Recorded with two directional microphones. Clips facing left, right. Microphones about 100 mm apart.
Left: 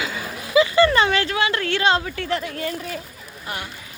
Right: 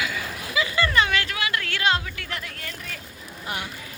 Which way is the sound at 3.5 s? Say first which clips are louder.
Left 1 dB; 20° right (ahead or behind).